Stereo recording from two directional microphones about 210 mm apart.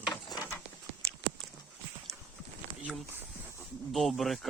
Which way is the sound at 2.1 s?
15° right (ahead or behind).